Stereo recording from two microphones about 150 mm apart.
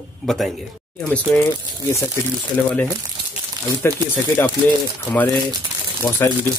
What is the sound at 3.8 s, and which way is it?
Speech, 15° left (ahead or behind).